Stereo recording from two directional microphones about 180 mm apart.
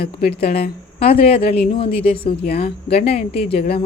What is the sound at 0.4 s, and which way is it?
A woman's voice, 35° left (ahead or behind).